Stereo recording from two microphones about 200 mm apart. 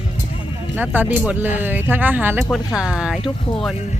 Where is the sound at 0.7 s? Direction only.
10° right (ahead or behind).